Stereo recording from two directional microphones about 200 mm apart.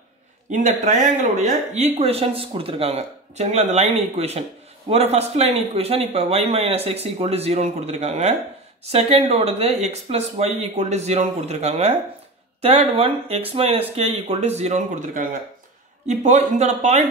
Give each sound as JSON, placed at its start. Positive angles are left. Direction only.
{"t": 0.5, "sound": "speech", "side_deg": -40}